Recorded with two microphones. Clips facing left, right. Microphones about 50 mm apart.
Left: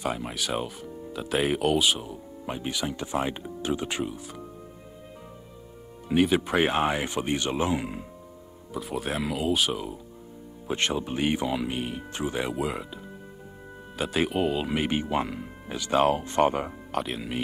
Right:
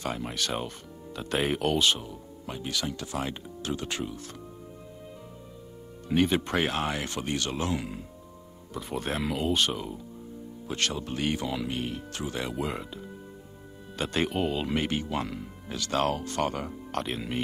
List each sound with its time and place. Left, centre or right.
0.0 s speech: centre
2.4 s speech: left
6.0 s speech: centre
6.6 s speech: centre
8.7 s speech: centre
10.7 s speech: left
12.5 s speech: centre
14.9 s speech: centre
16.9 s speech: centre